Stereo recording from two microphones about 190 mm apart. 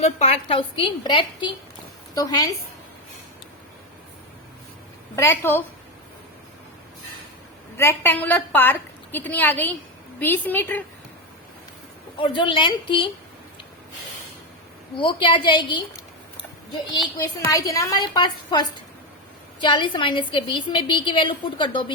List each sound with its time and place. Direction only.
0.0 s a woman's voice: 35° left (ahead or behind); by 2.5 s 20° left (ahead or behind)
5.1 s a woman's voice: 15° left (ahead or behind)
7.8 s a woman's voice: 10° left (ahead or behind)
12.2 s a woman's voice: 25° left (ahead or behind)
14.9 s a woman's voice: 25° left (ahead or behind)